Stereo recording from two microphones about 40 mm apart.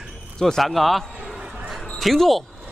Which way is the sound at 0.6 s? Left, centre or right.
Centre.